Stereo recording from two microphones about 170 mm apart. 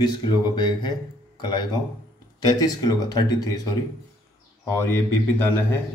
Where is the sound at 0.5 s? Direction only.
25° left (ahead or behind).